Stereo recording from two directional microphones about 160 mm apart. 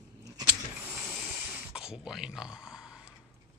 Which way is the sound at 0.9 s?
5° right (ahead or behind).